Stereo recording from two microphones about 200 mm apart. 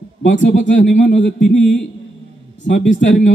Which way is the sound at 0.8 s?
35° left (ahead or behind).